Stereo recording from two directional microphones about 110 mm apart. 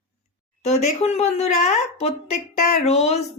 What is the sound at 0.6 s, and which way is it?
A woman's voice, 85° left.